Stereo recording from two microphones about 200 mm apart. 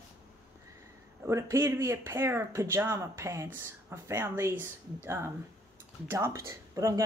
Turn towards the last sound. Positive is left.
turn(degrees=-15)  # may be behind; listen again after turning